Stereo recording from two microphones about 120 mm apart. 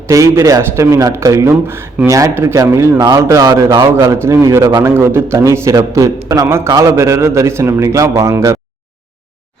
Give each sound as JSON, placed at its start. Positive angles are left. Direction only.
{"t": 0.1, "sound": "a man's voice", "side_deg": -25}